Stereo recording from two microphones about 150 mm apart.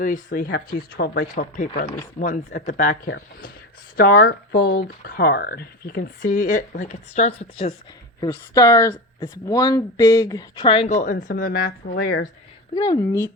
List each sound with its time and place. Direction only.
0.0 s speech: 60° left (ahead or behind)
3.9 s speech: 80° left; by 7.3 s 50° left (ahead or behind)
8.2 s speech: 25° left (ahead or behind)
10.6 s speech: 35° left (ahead or behind)
10.9 s speech: 60° left (ahead or behind); by 12.3 s 75° left (ahead or behind)
12.7 s speech: 25° left (ahead or behind)